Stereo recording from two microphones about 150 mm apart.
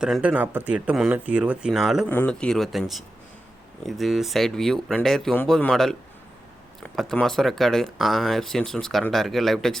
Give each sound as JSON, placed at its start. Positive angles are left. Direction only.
{"t": 0.0, "sound": "speech", "side_deg": -5}
{"t": 2.0, "sound": "speech", "side_deg": 10}